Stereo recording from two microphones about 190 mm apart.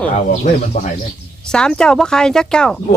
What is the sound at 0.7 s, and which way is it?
Speech, 40° left (ahead or behind).